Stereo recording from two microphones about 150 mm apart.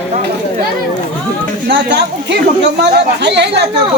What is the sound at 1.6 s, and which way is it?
Speech, 90° right.